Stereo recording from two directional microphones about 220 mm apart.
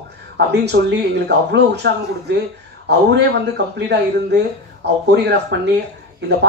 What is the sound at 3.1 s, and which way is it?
Speech, 50° right (ahead or behind).